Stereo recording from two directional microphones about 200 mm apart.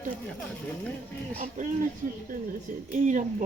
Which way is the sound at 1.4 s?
40° right (ahead or behind).